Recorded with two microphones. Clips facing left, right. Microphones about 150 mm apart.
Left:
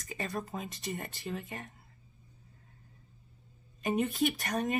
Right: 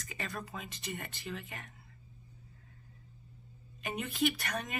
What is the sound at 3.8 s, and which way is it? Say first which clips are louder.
Speech: left 4 dB; 40° left (ahead or behind).